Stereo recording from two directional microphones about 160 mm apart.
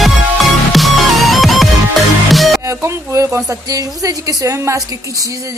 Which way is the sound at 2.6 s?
20° right (ahead or behind).